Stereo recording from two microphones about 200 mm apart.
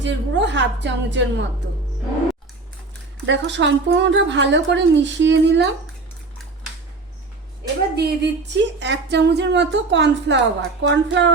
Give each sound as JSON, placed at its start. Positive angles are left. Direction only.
{"t": 0.0, "sound": "speech", "side_deg": -60}
{"t": 3.2, "sound": "speech", "side_deg": -65}
{"t": 7.9, "sound": "speech", "side_deg": -60}